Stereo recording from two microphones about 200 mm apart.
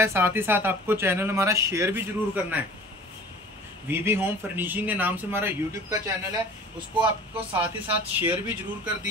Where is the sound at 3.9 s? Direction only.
10° right (ahead or behind).